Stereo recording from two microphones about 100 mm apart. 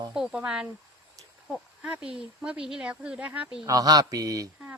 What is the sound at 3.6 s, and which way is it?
Speech, 40° right (ahead or behind).